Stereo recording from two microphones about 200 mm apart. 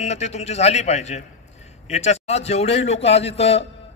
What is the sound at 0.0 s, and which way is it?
A man's voice, 35° left (ahead or behind).